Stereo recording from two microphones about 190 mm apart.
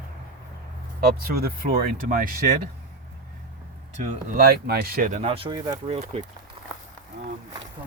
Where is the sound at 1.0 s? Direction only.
55° right (ahead or behind).